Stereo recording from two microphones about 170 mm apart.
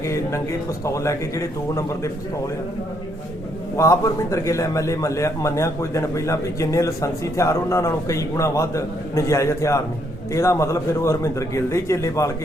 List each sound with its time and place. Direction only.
0.0 s a man's voice: 15° left (ahead or behind)
3.8 s a man's voice: 20° left (ahead or behind)